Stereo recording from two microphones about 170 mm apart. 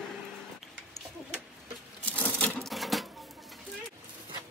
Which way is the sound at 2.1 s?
10° left (ahead or behind).